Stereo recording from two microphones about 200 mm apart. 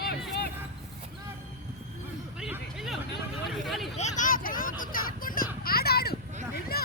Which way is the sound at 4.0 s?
40° left (ahead or behind).